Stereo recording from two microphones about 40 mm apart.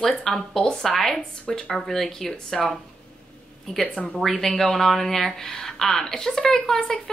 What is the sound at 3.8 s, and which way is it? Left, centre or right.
Speech, left.